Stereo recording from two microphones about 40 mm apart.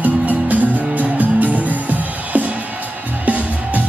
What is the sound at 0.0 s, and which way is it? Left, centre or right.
Music, right.